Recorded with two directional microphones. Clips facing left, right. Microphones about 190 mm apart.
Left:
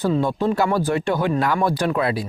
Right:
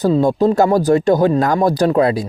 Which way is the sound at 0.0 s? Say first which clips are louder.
Right 7 dB; 40° right (ahead or behind).